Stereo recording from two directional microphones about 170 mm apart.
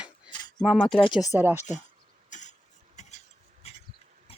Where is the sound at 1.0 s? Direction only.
25° left (ahead or behind).